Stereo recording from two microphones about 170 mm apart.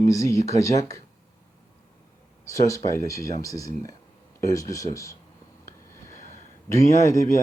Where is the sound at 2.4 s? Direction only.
20° left (ahead or behind).